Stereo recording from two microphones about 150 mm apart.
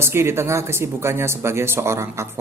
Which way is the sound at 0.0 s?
15° right (ahead or behind).